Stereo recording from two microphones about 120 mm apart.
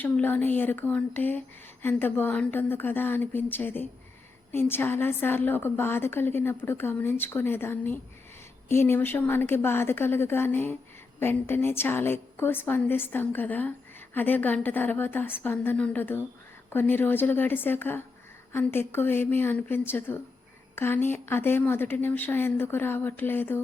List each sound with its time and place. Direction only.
0.0 s a woman's voice: 15° left (ahead or behind)